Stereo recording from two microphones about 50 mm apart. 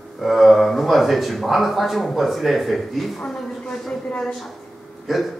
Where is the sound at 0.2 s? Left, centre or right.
Centre.